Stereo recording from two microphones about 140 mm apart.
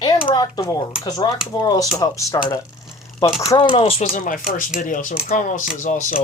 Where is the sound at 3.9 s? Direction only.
70° left (ahead or behind).